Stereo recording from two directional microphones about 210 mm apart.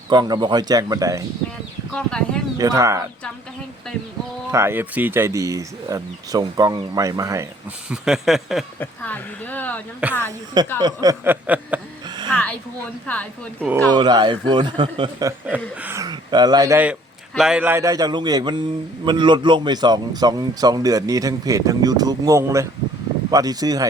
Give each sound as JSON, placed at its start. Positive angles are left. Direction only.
{"t": 0.1, "sound": "a man's voice", "side_deg": -20}
{"t": 1.9, "sound": "speech", "side_deg": 5}
{"t": 2.6, "sound": "a man's voice", "side_deg": -15}
{"t": 4.5, "sound": "a man's voice", "side_deg": -10}
{"t": 7.9, "sound": "speech", "side_deg": -5}
{"t": 10.0, "sound": "speech", "side_deg": -5}
{"t": 10.8, "sound": "a man's voice", "side_deg": -20}
{"t": 12.0, "sound": "a sound", "side_deg": -20}
{"t": 12.3, "sound": "speech", "side_deg": 5}
{"t": 13.9, "sound": "a man's voice", "side_deg": -20}
{"t": 15.4, "sound": "a man's voice", "side_deg": -5}